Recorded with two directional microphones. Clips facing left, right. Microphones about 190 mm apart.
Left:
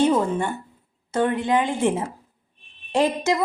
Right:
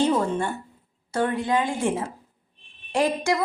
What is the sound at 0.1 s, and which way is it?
A woman's voice, 15° left (ahead or behind).